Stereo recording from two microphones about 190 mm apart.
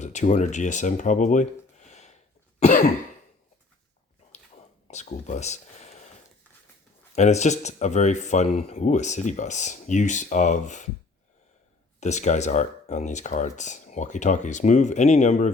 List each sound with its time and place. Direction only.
0.0 s speech: 40° left (ahead or behind)
2.6 s cough: 40° left (ahead or behind)
4.9 s speech: 35° left (ahead or behind)
7.2 s speech: 35° left (ahead or behind)
11.9 s speech: 35° left (ahead or behind)